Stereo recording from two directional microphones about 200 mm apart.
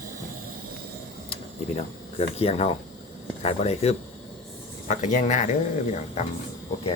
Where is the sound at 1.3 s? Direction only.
30° left (ahead or behind).